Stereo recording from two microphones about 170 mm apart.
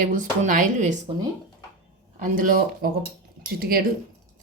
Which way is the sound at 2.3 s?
55° right (ahead or behind).